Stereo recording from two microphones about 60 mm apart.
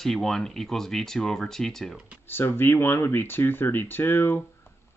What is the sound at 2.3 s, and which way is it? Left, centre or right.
Speech, left.